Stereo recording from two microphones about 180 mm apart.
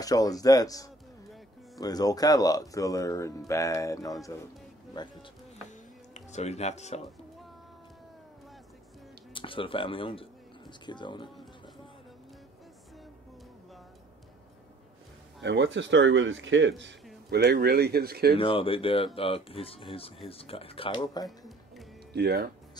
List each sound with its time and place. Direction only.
0.0 s speech: 20° left (ahead or behind)
5.7 s music: 40° left (ahead or behind)
9.3 s speech: 30° left (ahead or behind)
15.4 s a man's voice: 80° right
17.3 s speech: 65° right (ahead or behind)
18.4 s speech: 30° left (ahead or behind)
22.1 s speech: 60° right (ahead or behind)